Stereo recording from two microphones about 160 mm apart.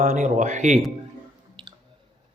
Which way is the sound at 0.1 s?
50° right (ahead or behind).